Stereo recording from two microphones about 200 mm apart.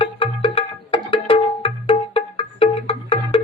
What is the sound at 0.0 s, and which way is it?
Music, 30° left (ahead or behind).